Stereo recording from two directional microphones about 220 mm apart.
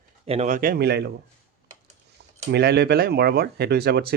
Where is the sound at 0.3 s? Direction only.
30° right (ahead or behind); by 1.1 s 50° right (ahead or behind).